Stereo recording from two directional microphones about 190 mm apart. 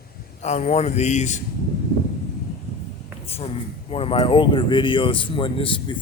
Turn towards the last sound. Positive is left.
turn(degrees=25)  # may be behind; listen again after turning